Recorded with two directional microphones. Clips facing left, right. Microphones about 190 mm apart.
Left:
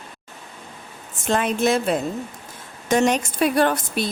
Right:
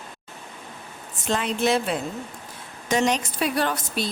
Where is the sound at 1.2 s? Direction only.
50° left (ahead or behind).